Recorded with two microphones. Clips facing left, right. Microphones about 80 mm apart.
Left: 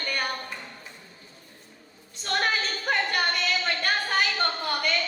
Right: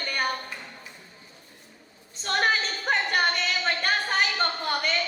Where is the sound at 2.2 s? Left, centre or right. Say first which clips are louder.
Right 2 dB; right.